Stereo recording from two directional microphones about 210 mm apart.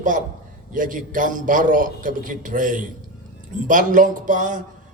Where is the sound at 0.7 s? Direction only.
40° right (ahead or behind).